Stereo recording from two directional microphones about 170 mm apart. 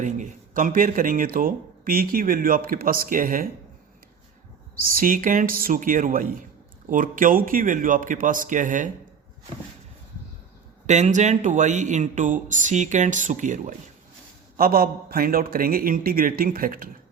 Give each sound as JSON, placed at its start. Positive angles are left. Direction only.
{"t": 0.0, "sound": "speech", "side_deg": -50}
{"t": 4.8, "sound": "speech", "side_deg": -55}
{"t": 10.8, "sound": "speech", "side_deg": -45}
{"t": 14.5, "sound": "speech", "side_deg": -60}